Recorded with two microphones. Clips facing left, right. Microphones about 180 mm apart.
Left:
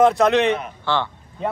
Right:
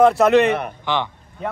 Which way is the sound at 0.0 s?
Centre (ahead or behind).